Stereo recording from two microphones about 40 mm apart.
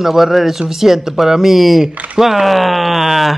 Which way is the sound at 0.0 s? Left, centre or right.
Centre.